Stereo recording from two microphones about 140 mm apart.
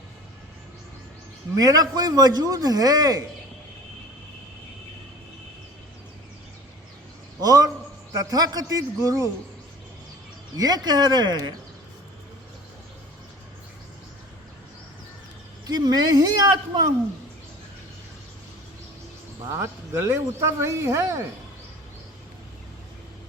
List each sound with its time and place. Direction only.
1.5 s a man's voice: 25° right (ahead or behind)
7.4 s a man's voice: 25° right (ahead or behind)
10.6 s a man's voice: 30° right (ahead or behind)
15.6 s a man's voice: 30° right (ahead or behind)
19.5 s a man's voice: 20° right (ahead or behind)